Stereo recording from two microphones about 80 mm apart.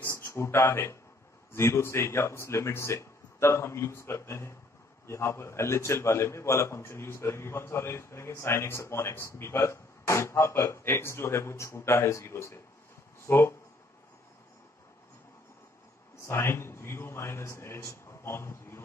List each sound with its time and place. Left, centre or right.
0.2 s a man's voice: left
16.3 s a man's voice: left